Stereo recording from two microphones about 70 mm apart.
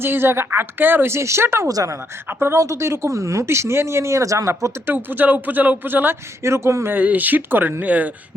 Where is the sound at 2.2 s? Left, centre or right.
Right.